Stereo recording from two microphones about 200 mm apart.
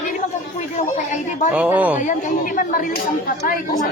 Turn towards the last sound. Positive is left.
turn(degrees=40)  # may be behind; listen again after turning